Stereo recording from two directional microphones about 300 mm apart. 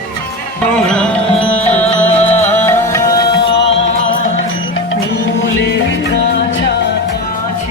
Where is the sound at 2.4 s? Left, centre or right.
Centre.